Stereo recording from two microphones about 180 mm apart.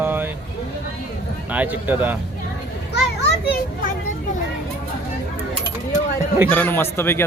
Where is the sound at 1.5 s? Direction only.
10° right (ahead or behind).